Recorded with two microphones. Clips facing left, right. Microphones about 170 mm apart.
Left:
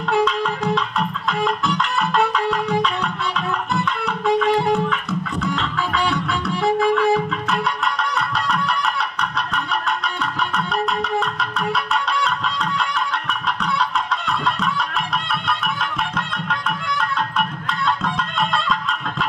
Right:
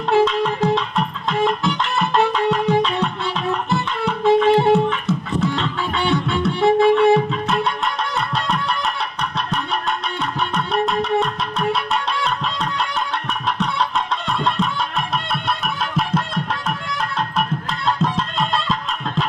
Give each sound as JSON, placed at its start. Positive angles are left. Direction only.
{"t": 0.1, "sound": "music", "side_deg": -25}
{"t": 10.5, "sound": "music", "side_deg": -25}
{"t": 17.8, "sound": "music", "side_deg": -30}